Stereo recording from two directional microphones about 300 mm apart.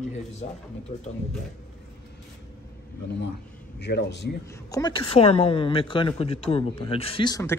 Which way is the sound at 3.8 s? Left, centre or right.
Left.